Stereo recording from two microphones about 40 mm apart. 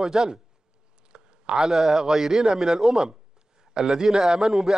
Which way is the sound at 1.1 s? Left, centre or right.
Centre.